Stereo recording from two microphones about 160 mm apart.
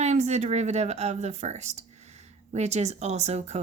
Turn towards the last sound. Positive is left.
turn(degrees=-45)  # may be behind; listen again after turning